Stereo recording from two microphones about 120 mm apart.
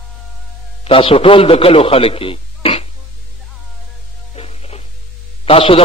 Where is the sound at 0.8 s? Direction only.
50° left (ahead or behind).